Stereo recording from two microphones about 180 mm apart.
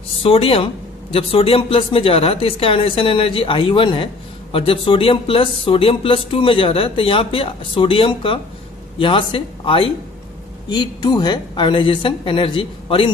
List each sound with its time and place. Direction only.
0.2 s speech: 30° left (ahead or behind)